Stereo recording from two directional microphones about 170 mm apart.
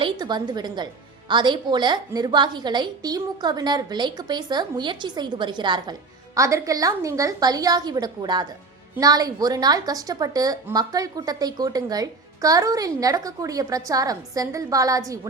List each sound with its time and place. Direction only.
0.0 s a woman's voice: 25° right (ahead or behind)